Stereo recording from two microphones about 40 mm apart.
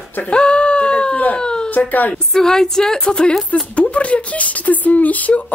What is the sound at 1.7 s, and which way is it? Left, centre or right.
Speech, left.